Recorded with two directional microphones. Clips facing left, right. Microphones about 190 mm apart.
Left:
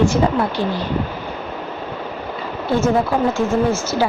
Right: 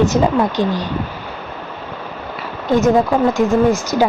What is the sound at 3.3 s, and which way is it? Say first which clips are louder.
Speech: right 4 dB; 15° right (ahead or behind).